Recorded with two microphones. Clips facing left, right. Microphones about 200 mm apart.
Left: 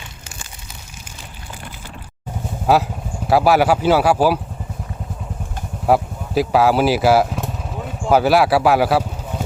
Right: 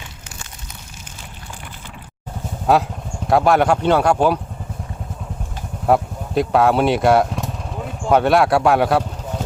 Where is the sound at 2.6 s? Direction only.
Centre (ahead or behind).